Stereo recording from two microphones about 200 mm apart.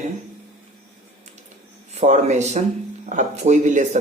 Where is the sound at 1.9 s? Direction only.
35° right (ahead or behind).